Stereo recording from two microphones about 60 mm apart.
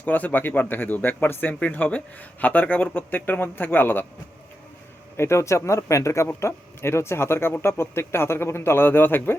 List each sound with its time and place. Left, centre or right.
0.0 s a man's voice: left
5.1 s speech: left